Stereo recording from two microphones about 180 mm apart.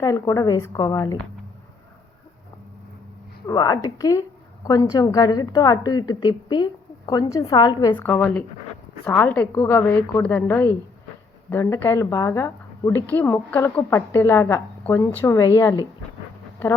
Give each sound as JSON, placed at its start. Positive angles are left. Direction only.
{"t": 0.0, "sound": "a woman's voice", "side_deg": 20}
{"t": 3.4, "sound": "a woman's voice", "side_deg": 20}
{"t": 7.9, "sound": "a woman's voice", "side_deg": 10}